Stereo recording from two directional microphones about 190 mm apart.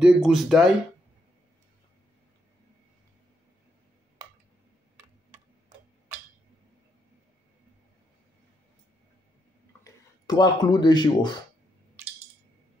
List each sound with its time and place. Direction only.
0.0 s speech: centre (ahead or behind)
9.8 s speech: 20° left (ahead or behind)